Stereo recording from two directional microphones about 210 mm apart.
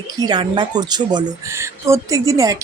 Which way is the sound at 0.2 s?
20° right (ahead or behind).